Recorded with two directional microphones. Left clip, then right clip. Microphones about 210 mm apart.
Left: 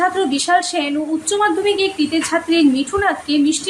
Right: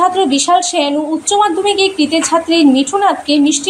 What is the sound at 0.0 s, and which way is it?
A woman's voice, 5° right (ahead or behind).